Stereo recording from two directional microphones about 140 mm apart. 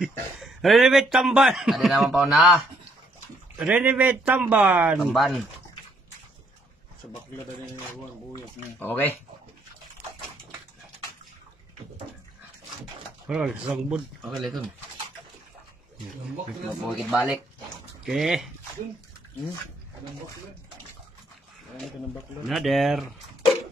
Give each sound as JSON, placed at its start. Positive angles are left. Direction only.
{"t": 0.0, "sound": "a man's voice", "side_deg": 0}
{"t": 8.7, "sound": "speech", "side_deg": 15}
{"t": 13.3, "sound": "a man's voice", "side_deg": -5}
{"t": 17.1, "sound": "a man's voice", "side_deg": 0}
{"t": 22.5, "sound": "a man's voice", "side_deg": 0}